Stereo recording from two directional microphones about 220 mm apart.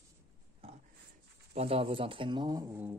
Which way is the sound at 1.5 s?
25° right (ahead or behind).